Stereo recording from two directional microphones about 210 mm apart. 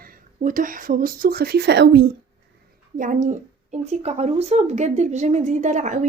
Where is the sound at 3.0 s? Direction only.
35° right (ahead or behind).